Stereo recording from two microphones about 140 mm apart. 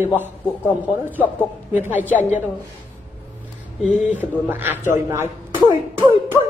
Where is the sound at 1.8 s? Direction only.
15° right (ahead or behind).